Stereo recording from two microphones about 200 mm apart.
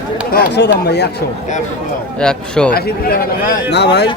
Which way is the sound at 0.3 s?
55° left (ahead or behind).